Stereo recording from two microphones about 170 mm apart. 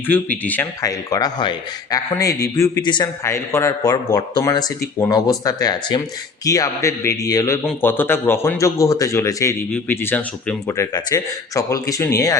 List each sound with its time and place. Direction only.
0.1 s speech: 10° left (ahead or behind)
7.6 s speech: 10° left (ahead or behind)